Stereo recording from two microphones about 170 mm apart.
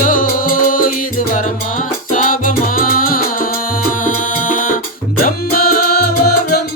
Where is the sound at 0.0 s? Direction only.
55° left (ahead or behind).